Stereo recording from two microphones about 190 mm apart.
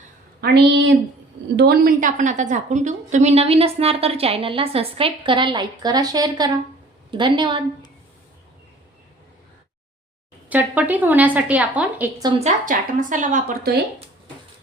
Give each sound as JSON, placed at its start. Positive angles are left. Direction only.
{"t": 0.4, "sound": "a woman's voice", "side_deg": -60}
{"t": 10.5, "sound": "a woman's voice", "side_deg": -10}
{"t": 12.4, "sound": "a woman's voice", "side_deg": -40}